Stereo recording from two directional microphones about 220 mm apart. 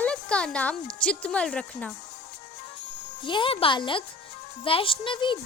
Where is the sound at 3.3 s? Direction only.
25° left (ahead or behind).